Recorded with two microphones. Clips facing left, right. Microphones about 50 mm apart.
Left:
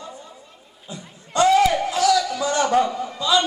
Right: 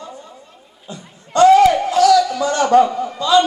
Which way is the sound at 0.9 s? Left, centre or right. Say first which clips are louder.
Right 3 dB; centre.